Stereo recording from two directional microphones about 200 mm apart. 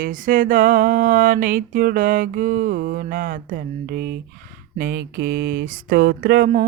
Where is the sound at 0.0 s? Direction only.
45° right (ahead or behind).